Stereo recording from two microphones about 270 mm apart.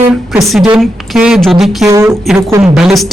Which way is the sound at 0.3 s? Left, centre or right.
Centre.